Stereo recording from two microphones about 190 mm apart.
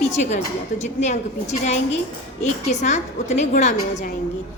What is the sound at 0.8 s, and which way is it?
A woman's voice, 40° left (ahead or behind).